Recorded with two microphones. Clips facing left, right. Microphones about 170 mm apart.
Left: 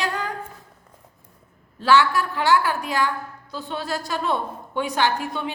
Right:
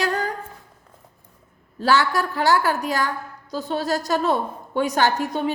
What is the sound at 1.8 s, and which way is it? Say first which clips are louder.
A woman's voice: left 1 dB; 40° right (ahead or behind).